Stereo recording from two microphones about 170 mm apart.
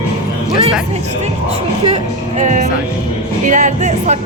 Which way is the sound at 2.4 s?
45° right (ahead or behind).